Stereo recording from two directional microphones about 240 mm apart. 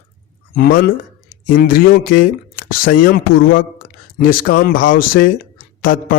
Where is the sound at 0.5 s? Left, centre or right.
Left.